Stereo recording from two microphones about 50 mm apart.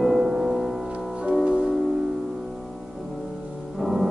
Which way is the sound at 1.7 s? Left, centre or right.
Centre.